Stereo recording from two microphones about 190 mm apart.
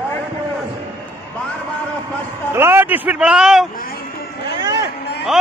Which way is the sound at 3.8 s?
50° left (ahead or behind).